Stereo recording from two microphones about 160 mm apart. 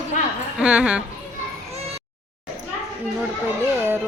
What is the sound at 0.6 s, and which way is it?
Speech, 5° right (ahead or behind).